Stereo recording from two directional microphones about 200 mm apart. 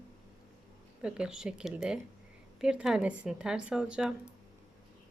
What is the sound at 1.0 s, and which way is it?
A woman's voice, 5° right (ahead or behind).